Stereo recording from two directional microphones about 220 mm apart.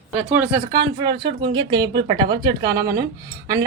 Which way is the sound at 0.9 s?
20° right (ahead or behind).